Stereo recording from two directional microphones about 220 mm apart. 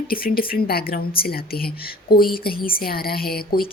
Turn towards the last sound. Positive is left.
turn(degrees=45)  # may be behind; listen again after turning